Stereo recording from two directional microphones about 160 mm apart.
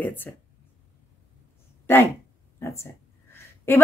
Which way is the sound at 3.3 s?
15° left (ahead or behind).